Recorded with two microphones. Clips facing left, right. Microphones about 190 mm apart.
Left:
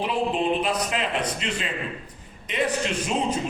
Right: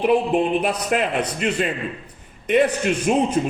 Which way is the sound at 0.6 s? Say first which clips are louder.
Right 4 dB; 55° right (ahead or behind).